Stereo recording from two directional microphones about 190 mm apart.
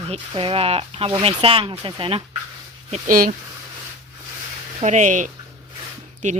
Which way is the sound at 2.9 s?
45° right (ahead or behind).